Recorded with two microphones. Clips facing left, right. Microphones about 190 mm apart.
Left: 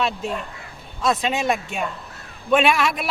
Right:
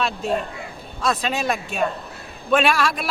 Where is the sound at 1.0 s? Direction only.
20° left (ahead or behind).